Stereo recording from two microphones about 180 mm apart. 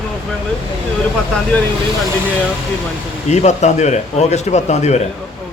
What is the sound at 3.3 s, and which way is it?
A man's voice, 40° left (ahead or behind).